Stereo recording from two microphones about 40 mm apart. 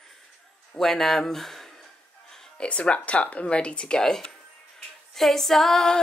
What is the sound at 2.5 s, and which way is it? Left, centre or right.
Speech, left.